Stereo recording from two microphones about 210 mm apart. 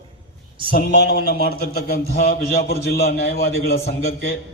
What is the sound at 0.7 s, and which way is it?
A man's voice, 45° left (ahead or behind).